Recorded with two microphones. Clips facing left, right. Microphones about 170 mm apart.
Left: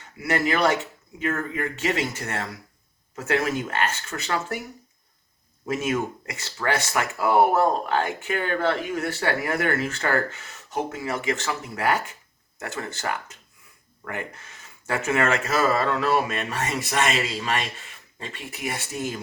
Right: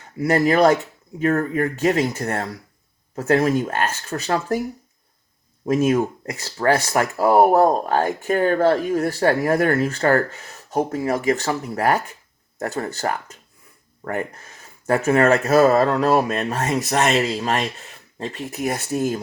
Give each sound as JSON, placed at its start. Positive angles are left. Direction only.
{"t": 0.2, "sound": "speech", "side_deg": -40}
{"t": 5.6, "sound": "speech", "side_deg": -40}